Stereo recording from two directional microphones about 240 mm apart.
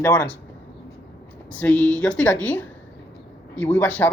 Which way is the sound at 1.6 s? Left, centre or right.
Centre.